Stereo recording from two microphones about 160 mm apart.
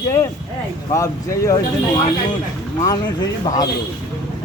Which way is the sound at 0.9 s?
20° left (ahead or behind).